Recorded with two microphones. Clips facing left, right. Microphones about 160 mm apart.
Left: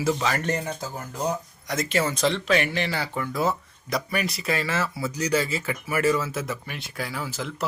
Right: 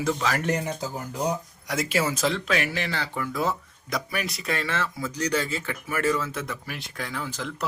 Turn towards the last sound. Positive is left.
turn(degrees=5)  # may be behind; listen again after turning